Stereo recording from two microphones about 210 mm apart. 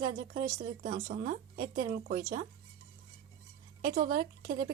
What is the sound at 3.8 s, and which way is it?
Speech, 40° right (ahead or behind).